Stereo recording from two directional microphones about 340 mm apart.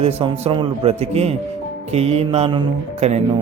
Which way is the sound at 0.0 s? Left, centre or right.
Centre.